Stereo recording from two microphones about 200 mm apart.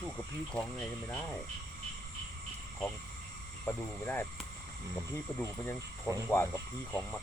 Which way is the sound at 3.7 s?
10° left (ahead or behind).